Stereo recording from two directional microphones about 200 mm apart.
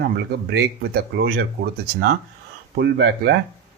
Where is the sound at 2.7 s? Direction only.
55° right (ahead or behind).